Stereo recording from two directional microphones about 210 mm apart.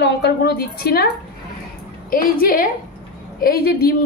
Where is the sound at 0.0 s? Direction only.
50° left (ahead or behind).